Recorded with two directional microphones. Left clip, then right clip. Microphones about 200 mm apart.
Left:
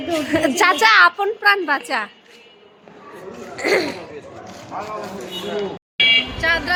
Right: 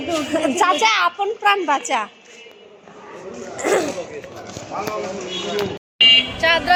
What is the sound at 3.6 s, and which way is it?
Speech, 15° left (ahead or behind).